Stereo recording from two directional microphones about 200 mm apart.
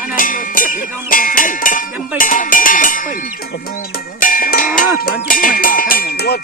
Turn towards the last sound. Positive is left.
turn(degrees=55)  # may be behind; listen again after turning